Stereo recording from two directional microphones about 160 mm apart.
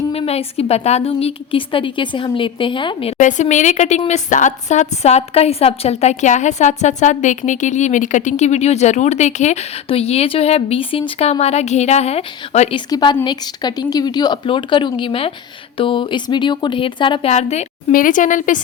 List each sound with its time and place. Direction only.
0.1 s a woman's voice: 40° left (ahead or behind)
12.9 s speech: 25° left (ahead or behind)
17.3 s a woman's voice: 45° left (ahead or behind)
17.9 s a woman's voice: 55° left (ahead or behind)